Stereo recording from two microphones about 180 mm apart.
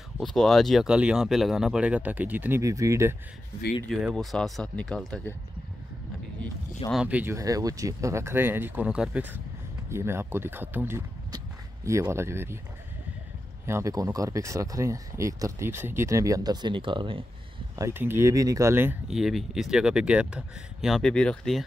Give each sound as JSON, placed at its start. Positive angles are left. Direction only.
{"t": 0.2, "sound": "speech", "side_deg": 0}
{"t": 3.9, "sound": "speech", "side_deg": 0}
{"t": 6.9, "sound": "speech", "side_deg": -5}
{"t": 13.7, "sound": "speech", "side_deg": -15}
{"t": 17.7, "sound": "speech", "side_deg": -15}